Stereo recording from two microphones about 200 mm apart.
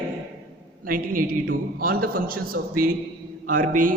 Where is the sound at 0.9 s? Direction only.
45° right (ahead or behind).